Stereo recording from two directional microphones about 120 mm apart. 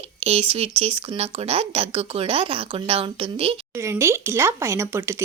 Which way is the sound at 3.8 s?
25° right (ahead or behind).